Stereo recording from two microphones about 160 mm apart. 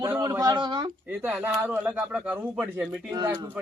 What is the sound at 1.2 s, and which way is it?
Speech, 10° right (ahead or behind).